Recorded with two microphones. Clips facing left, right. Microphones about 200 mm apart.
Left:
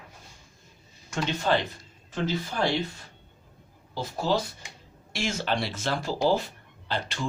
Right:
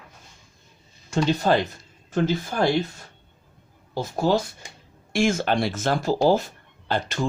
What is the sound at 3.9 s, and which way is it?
Speech, 50° right (ahead or behind).